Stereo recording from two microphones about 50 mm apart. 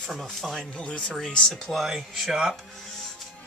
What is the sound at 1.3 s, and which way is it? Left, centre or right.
Speech, centre.